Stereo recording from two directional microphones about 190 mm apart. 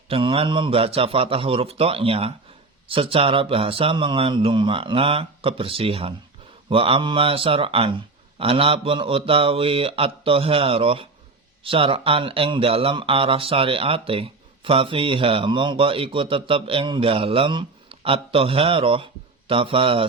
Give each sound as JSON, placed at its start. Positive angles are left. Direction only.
{"t": 0.1, "sound": "speech", "side_deg": -25}